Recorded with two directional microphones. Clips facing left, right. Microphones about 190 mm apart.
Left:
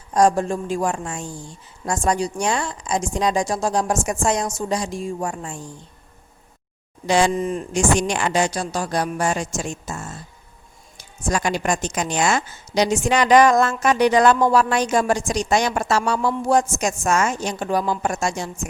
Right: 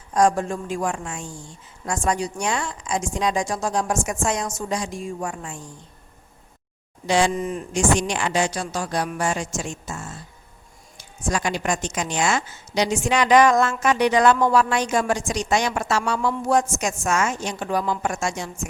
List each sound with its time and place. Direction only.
0.1 s a woman's voice: 35° left (ahead or behind)
7.7 s a woman's voice: 45° left (ahead or behind)
11.3 s a woman's voice: 40° left (ahead or behind)